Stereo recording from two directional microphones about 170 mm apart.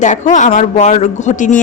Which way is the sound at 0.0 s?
45° left (ahead or behind).